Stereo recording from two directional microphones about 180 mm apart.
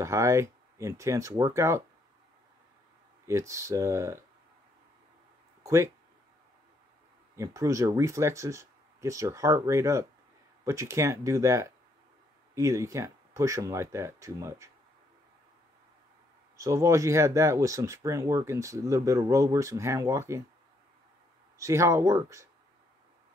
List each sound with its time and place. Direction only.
0.0 s speech: 15° right (ahead or behind)
3.3 s speech: 15° right (ahead or behind)
5.6 s a sound: 15° right (ahead or behind)
7.3 s speech: 15° right (ahead or behind)
16.5 s speech: 15° right (ahead or behind)
21.5 s speech: 15° right (ahead or behind)